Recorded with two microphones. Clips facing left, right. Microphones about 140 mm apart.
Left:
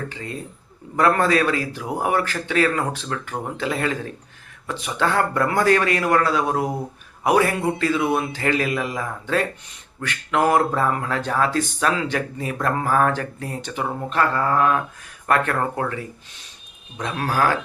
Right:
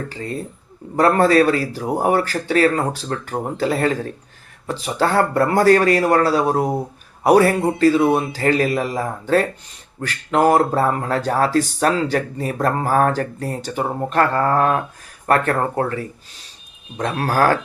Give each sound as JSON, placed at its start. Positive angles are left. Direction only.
{"t": 0.1, "sound": "speech", "side_deg": -35}
{"t": 17.2, "sound": "speech", "side_deg": -40}